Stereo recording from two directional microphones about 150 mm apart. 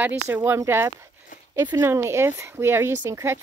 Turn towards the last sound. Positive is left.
turn(degrees=-15)  # may be behind; listen again after turning